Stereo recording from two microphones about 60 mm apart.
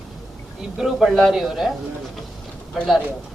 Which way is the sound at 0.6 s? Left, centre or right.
Centre.